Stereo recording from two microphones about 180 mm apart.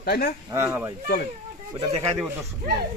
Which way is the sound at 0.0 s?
55° left (ahead or behind).